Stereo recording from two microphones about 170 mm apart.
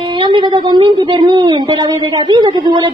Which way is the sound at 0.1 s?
30° right (ahead or behind).